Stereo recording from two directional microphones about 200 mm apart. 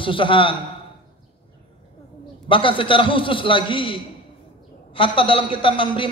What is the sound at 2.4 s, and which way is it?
A man's voice, 25° left (ahead or behind).